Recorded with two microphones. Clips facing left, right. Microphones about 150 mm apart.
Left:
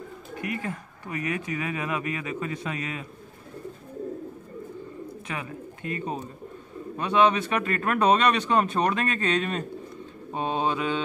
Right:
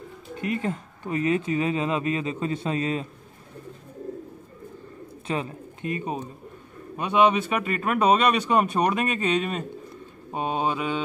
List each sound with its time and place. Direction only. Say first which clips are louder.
0.4 s speech: right 5 dB; 25° right (ahead or behind)
5.2 s speech: right 9 dB; 30° right (ahead or behind); by 11.0 s 10° right (ahead or behind)